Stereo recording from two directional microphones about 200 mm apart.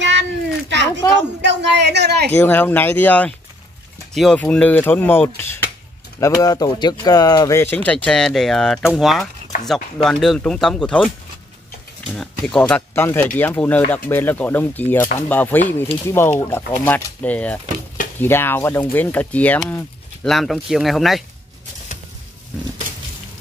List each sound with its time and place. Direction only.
0.0 s a sound: 60° right (ahead or behind)
2.3 s speech: 10° left (ahead or behind)
12.1 s speech: 5° left (ahead or behind)